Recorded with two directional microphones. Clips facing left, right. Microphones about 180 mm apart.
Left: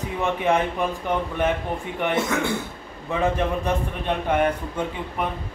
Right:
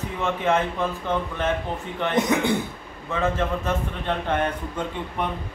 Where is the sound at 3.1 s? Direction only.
15° left (ahead or behind).